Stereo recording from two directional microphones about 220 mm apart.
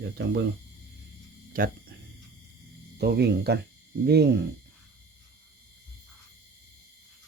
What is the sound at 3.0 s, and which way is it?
Speech, 45° right (ahead or behind).